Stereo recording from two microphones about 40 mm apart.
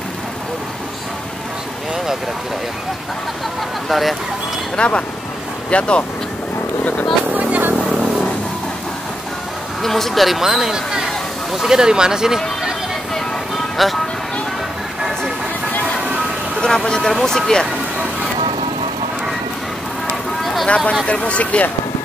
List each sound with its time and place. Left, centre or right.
3.9 s speech: centre
4.7 s speech: left
9.8 s speech: centre
13.8 s speech: centre
16.6 s speech: centre
20.6 s speech: left